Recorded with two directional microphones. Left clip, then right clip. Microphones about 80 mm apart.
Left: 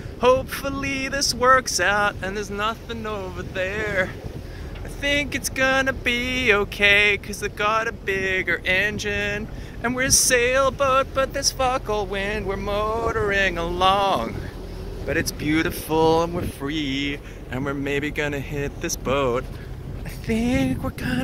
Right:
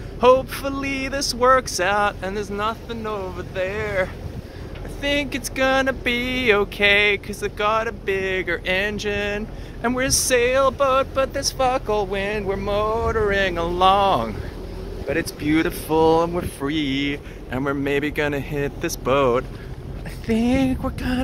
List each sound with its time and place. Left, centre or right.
0.2 s speech: right; by 3.0 s centre
3.0 s speech: centre
5.0 s speech: right
10.1 s speech: centre
11.6 s speech: right